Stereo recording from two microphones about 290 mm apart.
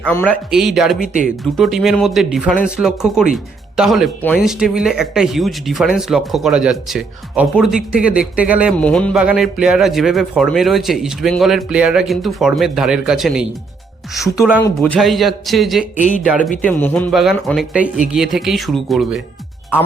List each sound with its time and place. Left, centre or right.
0.0 s speech: centre
1.0 s speech: right
1.5 s speech: centre
16.0 s speech: left
16.2 s speech: centre